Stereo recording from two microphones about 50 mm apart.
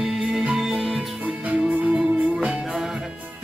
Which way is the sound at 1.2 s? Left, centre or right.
Right.